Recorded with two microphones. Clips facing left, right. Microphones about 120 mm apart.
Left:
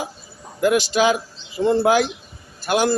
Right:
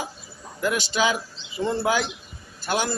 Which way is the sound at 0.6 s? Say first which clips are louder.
Left 6 dB; 45° left (ahead or behind).